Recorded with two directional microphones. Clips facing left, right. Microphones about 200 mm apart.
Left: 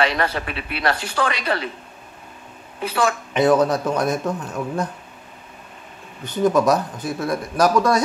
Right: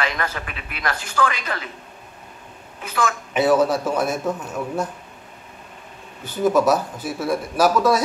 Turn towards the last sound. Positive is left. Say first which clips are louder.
# even
turn(degrees=-5)  # may be behind; listen again after turning